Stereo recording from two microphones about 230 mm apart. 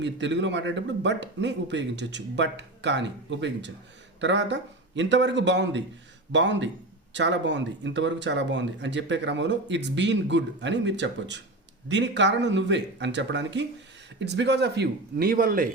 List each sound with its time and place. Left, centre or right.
0.0 s speech: right